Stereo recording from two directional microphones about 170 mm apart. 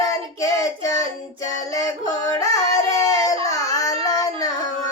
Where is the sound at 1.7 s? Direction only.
20° left (ahead or behind).